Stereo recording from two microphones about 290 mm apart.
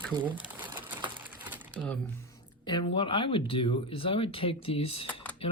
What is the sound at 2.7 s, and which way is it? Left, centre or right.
Speech, centre.